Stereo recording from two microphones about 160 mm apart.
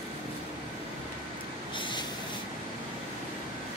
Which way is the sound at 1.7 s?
30° left (ahead or behind).